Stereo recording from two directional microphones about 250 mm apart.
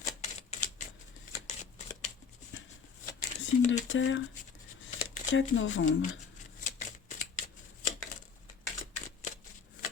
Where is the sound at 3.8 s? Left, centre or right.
Left.